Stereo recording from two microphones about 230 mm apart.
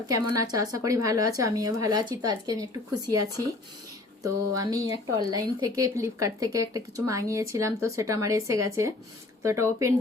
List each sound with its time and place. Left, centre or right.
0.3 s speech: centre